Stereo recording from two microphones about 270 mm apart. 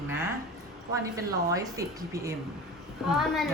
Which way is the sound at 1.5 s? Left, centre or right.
Centre.